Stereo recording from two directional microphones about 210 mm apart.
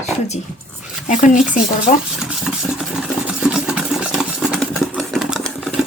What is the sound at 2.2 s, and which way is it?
Engine, 5° right (ahead or behind).